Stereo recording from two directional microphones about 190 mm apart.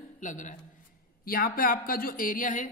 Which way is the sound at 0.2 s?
40° left (ahead or behind).